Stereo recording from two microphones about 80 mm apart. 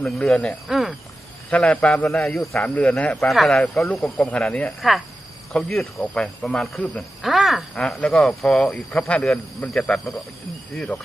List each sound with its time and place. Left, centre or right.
0.0 s speech: centre
0.7 s insect: centre
1.5 s speech: centre
2.2 s speech: centre
2.6 s speech: centre
3.2 s speech: centre
4.2 s speech: centre
4.8 s speech: centre
7.2 s speech: centre
7.8 s speech: centre